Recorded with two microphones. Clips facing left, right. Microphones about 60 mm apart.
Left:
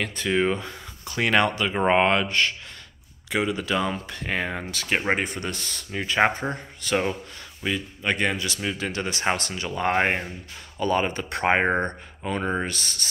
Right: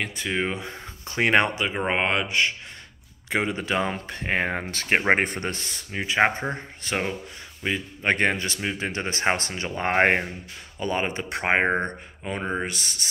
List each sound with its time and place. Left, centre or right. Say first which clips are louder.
0.0 s speech: left 4 dB; centre
0.7 s speech: right 1 dB; right
1.9 s speech: left 6 dB; centre
3.3 s speech: even; right
5.5 s speech: even; right
6.5 s speech: left 3 dB; right
8.0 s speech: right 3 dB; right
8.5 s speech: even; right
10.8 s speech: left 3 dB; centre